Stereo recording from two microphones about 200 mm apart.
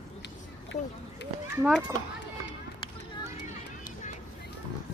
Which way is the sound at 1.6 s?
5° right (ahead or behind).